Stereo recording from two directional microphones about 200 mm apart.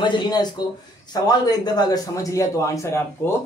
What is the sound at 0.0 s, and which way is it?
A man's voice, 20° left (ahead or behind).